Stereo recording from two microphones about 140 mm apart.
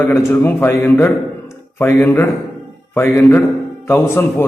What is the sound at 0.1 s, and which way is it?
A man's voice, 15° left (ahead or behind).